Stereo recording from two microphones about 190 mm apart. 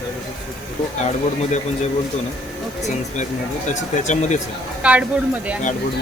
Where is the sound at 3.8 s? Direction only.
40° left (ahead or behind).